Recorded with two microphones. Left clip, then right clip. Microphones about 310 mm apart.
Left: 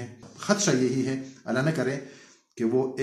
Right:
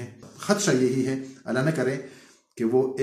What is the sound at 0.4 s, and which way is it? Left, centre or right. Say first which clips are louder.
Speech: right 2 dB; centre.